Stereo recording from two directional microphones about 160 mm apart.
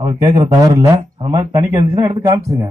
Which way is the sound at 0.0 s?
25° right (ahead or behind).